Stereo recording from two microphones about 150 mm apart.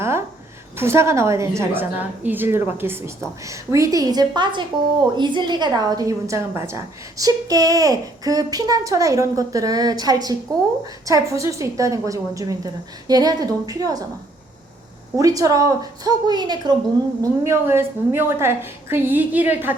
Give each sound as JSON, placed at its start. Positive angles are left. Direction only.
{"t": 0.0, "sound": "a sound", "side_deg": -15}
{"t": 0.8, "sound": "a woman's voice", "side_deg": -15}
{"t": 15.1, "sound": "a woman's voice", "side_deg": -25}
{"t": 17.4, "sound": "a woman's voice", "side_deg": -15}